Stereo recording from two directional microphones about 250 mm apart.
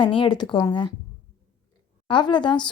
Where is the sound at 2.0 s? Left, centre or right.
Centre.